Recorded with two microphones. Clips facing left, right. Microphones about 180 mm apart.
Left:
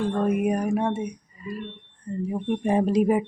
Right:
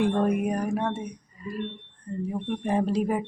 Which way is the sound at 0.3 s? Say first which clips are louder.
Left 3 dB; 5° left (ahead or behind).